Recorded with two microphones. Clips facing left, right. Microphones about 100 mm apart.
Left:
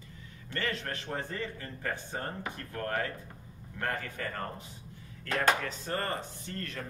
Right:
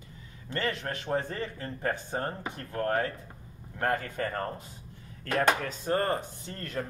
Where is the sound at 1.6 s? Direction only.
35° right (ahead or behind).